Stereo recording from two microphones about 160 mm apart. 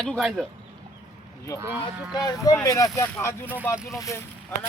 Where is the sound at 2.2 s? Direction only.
20° left (ahead or behind).